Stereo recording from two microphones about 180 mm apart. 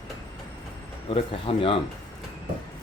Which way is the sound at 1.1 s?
30° left (ahead or behind).